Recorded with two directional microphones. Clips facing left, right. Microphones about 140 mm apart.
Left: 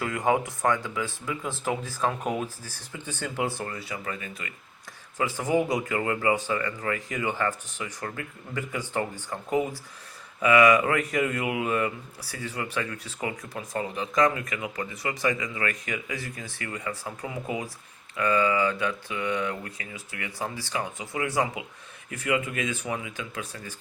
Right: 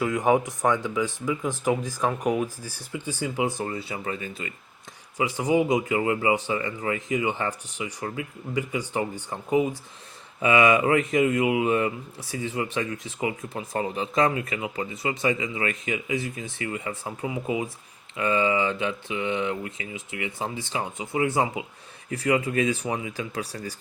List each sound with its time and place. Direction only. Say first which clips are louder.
0.0 s speech: right 3 dB; 15° right (ahead or behind)
5.1 s speech: right 2 dB; 15° right (ahead or behind)
13.5 s speech: right 3 dB; 30° right (ahead or behind)